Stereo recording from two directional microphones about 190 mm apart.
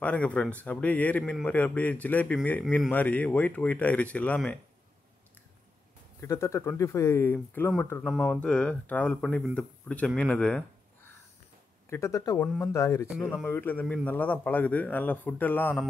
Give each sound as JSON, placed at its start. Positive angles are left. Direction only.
{"t": 0.0, "sound": "speech", "side_deg": 5}
{"t": 6.2, "sound": "speech", "side_deg": 15}
{"t": 8.1, "sound": "speech", "side_deg": 0}
{"t": 11.9, "sound": "speech", "side_deg": 15}